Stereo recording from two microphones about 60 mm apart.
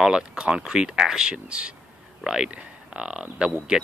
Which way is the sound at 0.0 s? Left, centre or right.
Centre.